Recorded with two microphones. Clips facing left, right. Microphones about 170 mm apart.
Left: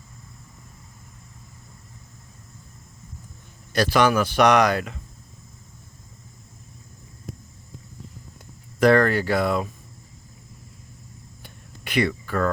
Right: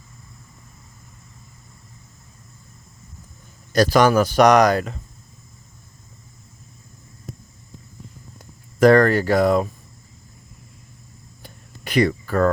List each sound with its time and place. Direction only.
3.7 s speech: 40° right (ahead or behind)
8.8 s speech: 40° right (ahead or behind)
11.4 s a sound: 40° right (ahead or behind)